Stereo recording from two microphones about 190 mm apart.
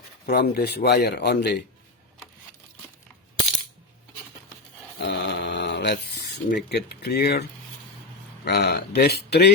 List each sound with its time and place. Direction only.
0.3 s speech: 55° left (ahead or behind)
4.9 s a sound: 60° left (ahead or behind)
6.7 s speech: 60° left (ahead or behind)
8.4 s speech: 60° left (ahead or behind)